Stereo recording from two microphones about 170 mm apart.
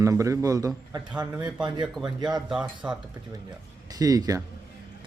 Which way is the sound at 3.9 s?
20° right (ahead or behind).